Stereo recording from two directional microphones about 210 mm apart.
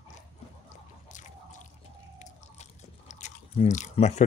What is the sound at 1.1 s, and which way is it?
Drip, 35° left (ahead or behind).